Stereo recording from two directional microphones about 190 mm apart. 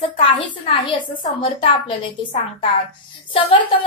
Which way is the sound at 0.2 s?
25° left (ahead or behind).